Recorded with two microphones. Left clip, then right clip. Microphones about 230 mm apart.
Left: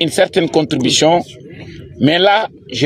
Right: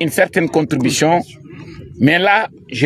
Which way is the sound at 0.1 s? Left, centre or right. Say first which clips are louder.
Left 1 dB; right.